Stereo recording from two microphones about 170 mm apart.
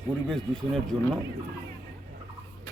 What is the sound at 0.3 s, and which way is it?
Speech, centre (ahead or behind).